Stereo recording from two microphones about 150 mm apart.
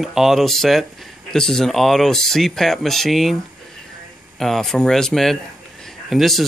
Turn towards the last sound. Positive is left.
turn(degrees=0)  # may be behind; listen again after turning